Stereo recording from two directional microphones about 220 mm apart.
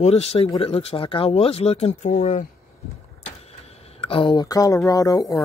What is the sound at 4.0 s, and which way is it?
Speech, 25° left (ahead or behind).